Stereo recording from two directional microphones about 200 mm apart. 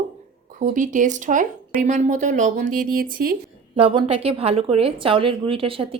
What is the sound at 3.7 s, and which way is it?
Speech, 25° right (ahead or behind).